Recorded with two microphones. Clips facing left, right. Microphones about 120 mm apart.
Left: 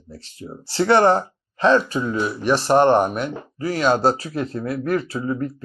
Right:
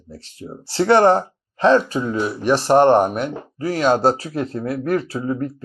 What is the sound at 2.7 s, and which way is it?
Speech, 40° right (ahead or behind).